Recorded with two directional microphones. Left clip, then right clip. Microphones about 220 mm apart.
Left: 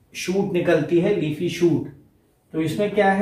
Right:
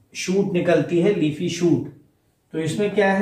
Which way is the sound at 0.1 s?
20° left (ahead or behind).